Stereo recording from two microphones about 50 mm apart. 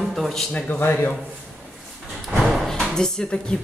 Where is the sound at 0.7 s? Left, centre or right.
Left.